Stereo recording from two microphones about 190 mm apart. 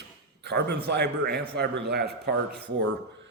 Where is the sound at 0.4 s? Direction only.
60° right (ahead or behind).